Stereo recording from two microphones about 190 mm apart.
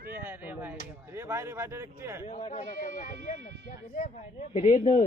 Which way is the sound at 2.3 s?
35° left (ahead or behind).